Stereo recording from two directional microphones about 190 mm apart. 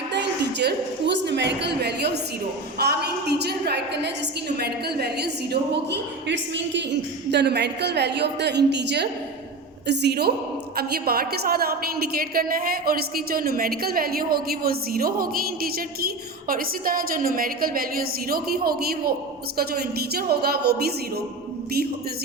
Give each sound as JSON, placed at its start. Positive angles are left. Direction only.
{"t": 0.6, "sound": "a woman's voice", "side_deg": -65}